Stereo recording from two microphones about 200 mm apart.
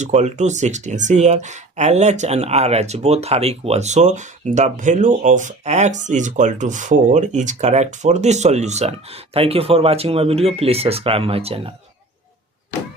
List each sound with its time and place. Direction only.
0.0 s speech: 35° right (ahead or behind)